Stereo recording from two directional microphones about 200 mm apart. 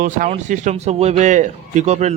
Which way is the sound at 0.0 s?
40° right (ahead or behind).